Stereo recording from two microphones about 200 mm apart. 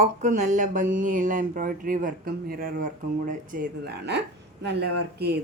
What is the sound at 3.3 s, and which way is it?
A woman's voice, 50° right (ahead or behind).